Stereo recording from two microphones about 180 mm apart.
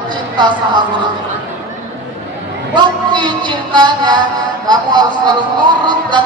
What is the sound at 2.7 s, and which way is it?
A man's voice, 25° right (ahead or behind).